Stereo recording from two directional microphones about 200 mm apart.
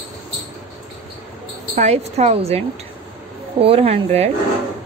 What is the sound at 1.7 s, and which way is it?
Speech, 35° right (ahead or behind).